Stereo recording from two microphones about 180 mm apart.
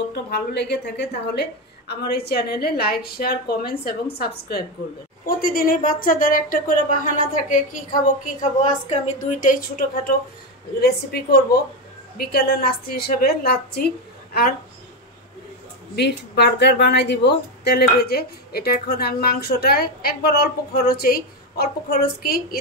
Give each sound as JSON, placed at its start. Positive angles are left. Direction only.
{"t": 0.1, "sound": "a woman's voice", "side_deg": 65}
{"t": 16.0, "sound": "a woman's voice", "side_deg": 65}